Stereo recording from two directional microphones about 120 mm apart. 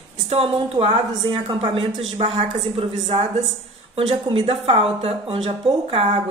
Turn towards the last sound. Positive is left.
turn(degrees=-55)  # may be behind; listen again after turning